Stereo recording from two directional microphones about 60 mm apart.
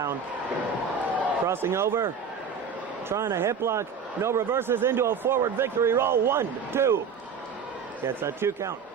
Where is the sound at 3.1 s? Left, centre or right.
Right.